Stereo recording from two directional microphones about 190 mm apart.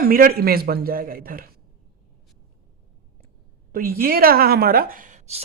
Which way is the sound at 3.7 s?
50° right (ahead or behind).